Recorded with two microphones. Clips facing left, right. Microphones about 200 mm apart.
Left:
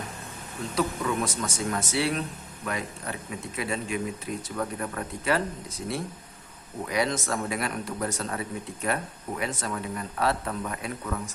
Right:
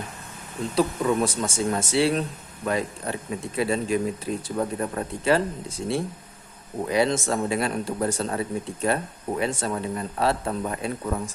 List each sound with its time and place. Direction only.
0.8 s speech: 30° right (ahead or behind)